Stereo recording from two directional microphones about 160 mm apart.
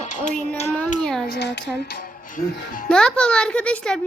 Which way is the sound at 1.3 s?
90° left.